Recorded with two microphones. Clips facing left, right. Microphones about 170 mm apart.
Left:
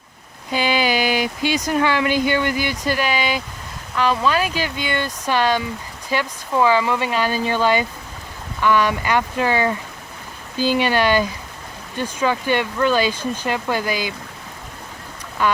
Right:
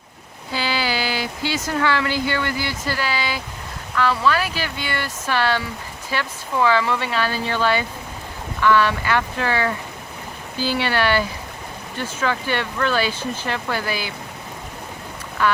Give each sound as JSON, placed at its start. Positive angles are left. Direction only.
{"t": 0.5, "sound": "speech", "side_deg": 20}
{"t": 15.4, "sound": "speech", "side_deg": 15}